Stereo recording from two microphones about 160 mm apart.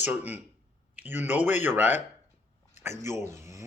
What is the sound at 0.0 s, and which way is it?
Speech, 10° right (ahead or behind).